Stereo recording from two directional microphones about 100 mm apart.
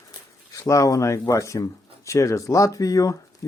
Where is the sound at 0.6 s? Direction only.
35° left (ahead or behind).